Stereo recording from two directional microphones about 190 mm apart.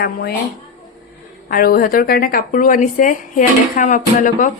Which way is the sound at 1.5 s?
50° left (ahead or behind).